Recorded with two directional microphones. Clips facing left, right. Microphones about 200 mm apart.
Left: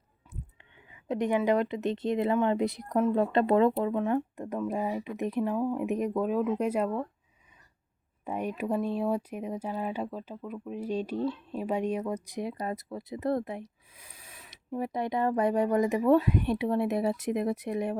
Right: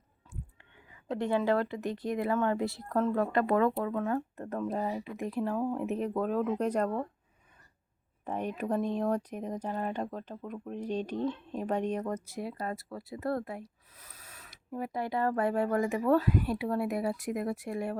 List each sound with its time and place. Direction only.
1.0 s speech: 15° left (ahead or behind)
8.2 s speech: 10° left (ahead or behind)